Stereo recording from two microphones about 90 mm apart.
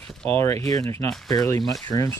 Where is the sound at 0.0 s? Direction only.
10° left (ahead or behind).